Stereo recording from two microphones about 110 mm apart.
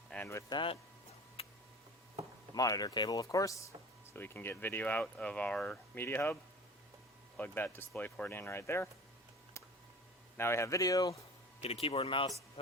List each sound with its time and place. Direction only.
0.5 s speech: 50° left (ahead or behind)
1.4 s tick: 60° left (ahead or behind)
2.6 s speech: 35° left (ahead or behind); by 6.3 s 20° left (ahead or behind)
7.3 s speech: 15° left (ahead or behind)
10.3 s speech: 25° left (ahead or behind)
11.6 s speech: 65° left (ahead or behind)